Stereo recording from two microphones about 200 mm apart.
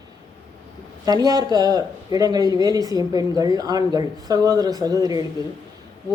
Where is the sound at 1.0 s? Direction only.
20° right (ahead or behind).